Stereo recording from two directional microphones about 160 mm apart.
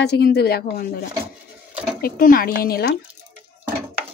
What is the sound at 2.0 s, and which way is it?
Speech, 65° left (ahead or behind).